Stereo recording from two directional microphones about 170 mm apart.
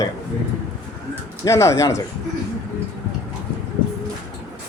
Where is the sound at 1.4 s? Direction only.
15° left (ahead or behind).